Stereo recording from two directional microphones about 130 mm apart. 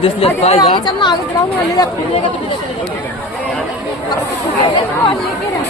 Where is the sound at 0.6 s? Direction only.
35° left (ahead or behind).